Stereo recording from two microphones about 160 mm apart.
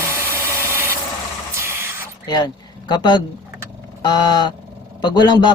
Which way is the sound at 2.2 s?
25° left (ahead or behind).